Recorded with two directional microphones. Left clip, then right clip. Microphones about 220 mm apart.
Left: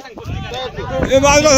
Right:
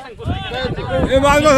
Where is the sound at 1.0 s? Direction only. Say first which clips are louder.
Left 2 dB; 10° left (ahead or behind).